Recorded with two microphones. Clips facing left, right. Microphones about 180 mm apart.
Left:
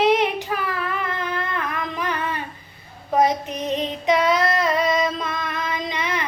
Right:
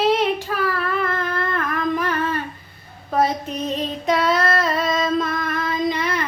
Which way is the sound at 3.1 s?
15° left (ahead or behind).